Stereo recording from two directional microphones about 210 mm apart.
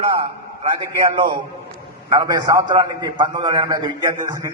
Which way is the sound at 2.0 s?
20° right (ahead or behind).